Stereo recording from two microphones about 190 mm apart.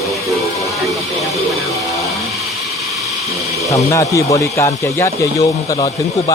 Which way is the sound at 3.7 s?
15° left (ahead or behind).